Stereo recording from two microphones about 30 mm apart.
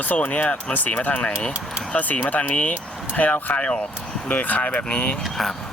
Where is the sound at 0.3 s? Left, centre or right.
Left.